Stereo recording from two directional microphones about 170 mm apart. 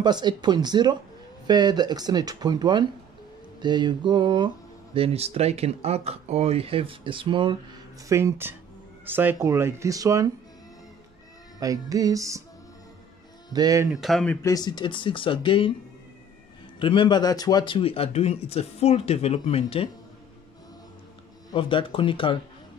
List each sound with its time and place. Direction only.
0.0 s speech: 25° right (ahead or behind)
8.1 s speech: 15° right (ahead or behind)
11.6 s speech: 20° right (ahead or behind)
13.5 s speech: 20° right (ahead or behind)
13.8 s speech: centre (ahead or behind)
14.5 s speech: 25° left (ahead or behind)
16.8 s speech: 30° left (ahead or behind)
21.5 s speech: 30° left (ahead or behind)